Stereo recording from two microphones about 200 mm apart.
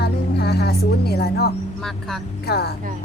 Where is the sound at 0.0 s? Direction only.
55° left (ahead or behind).